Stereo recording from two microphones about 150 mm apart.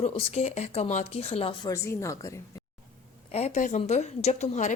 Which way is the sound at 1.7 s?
20° left (ahead or behind).